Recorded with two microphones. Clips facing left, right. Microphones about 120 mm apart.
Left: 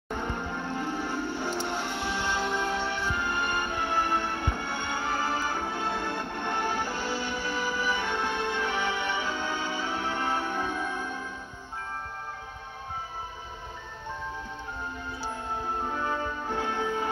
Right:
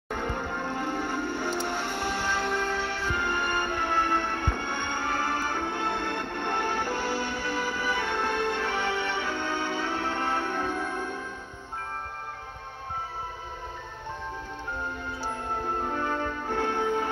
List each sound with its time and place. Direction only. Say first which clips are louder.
0.1 s music: right 1 dB; 55° right (ahead or behind)
1.5 s music: right 1 dB; centre (ahead or behind)
1.9 s music: right 1 dB; 45° right (ahead or behind)
2.5 s music: even; 20° left (ahead or behind)
2.9 s music: right 1 dB; 55° right (ahead or behind)
16.4 s music: right 4 dB; 50° right (ahead or behind)